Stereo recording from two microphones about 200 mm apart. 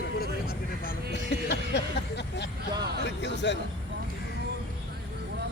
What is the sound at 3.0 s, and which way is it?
Speech, 60° left (ahead or behind).